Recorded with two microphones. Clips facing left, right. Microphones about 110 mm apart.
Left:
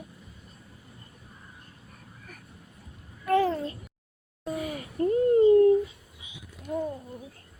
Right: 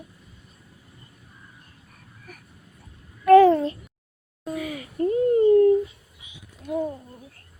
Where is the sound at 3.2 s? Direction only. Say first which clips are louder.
Right 11 dB; 85° right.